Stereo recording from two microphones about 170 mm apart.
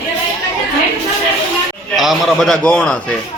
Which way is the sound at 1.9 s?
Centre (ahead or behind).